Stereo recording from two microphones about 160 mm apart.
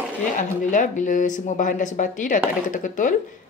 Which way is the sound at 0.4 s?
50° left (ahead or behind).